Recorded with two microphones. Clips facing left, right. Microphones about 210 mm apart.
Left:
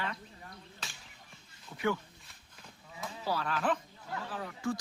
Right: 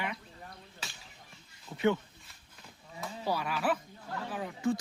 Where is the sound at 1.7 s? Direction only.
25° right (ahead or behind).